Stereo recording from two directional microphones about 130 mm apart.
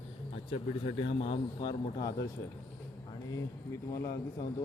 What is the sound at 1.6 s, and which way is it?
Speech, 30° left (ahead or behind).